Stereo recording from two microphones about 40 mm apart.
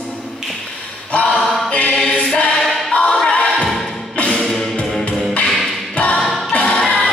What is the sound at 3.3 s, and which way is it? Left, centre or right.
Music, left.